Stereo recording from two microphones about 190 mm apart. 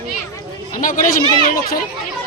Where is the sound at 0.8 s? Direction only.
45° left (ahead or behind).